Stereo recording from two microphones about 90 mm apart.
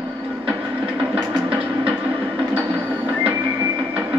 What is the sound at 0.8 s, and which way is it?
Music, 10° right (ahead or behind).